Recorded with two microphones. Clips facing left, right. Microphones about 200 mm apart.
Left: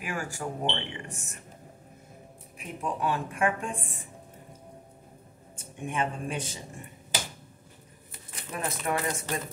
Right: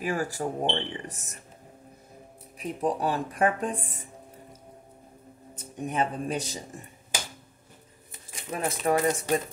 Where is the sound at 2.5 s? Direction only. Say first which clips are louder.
Right 6 dB; 35° right (ahead or behind).